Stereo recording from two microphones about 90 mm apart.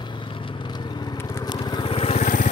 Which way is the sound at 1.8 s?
90° left.